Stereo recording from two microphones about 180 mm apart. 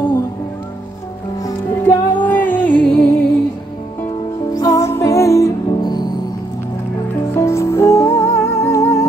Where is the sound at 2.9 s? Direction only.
30° left (ahead or behind).